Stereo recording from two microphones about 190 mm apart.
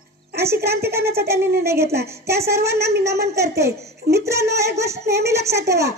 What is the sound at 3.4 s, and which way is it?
A child's voice, 15° right (ahead or behind).